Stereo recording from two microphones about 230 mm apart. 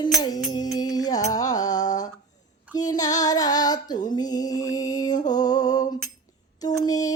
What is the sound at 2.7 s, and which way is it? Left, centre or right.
Female singing, centre.